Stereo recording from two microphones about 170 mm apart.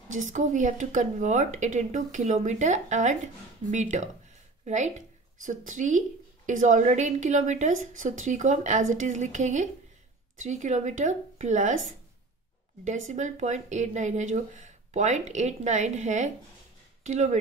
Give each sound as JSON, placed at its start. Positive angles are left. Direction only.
{"t": 0.1, "sound": "speech", "side_deg": -50}
{"t": 12.8, "sound": "speech", "side_deg": -45}